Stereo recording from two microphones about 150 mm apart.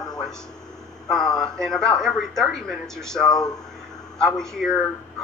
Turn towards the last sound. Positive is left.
turn(degrees=5)  # may be behind; listen again after turning